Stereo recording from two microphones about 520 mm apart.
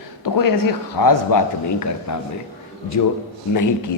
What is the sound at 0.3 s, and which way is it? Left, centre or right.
A man's voice, left.